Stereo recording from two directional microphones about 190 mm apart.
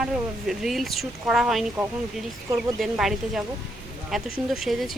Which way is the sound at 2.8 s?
Centre (ahead or behind).